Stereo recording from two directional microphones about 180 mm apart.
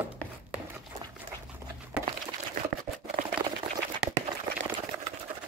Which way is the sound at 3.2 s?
45° right (ahead or behind).